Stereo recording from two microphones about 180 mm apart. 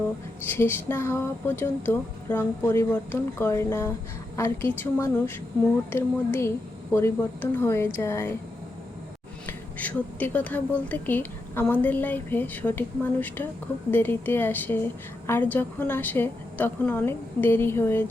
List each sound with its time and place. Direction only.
0.4 s speech: 10° left (ahead or behind)
9.5 s speech: 10° left (ahead or behind)